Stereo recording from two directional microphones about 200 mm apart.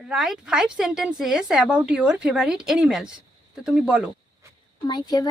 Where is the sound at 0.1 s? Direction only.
5° right (ahead or behind).